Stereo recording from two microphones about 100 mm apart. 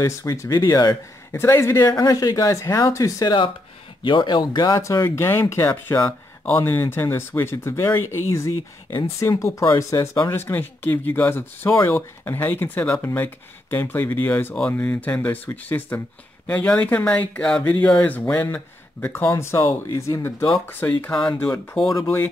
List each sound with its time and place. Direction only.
0.0 s speech: 30° left (ahead or behind)
1.3 s speech: 25° left (ahead or behind)
1.8 s speech: 40° left (ahead or behind)
3.3 s speech: 55° left (ahead or behind)
5.1 s speech: 25° left (ahead or behind)
10.4 s speech: 20° left (ahead or behind)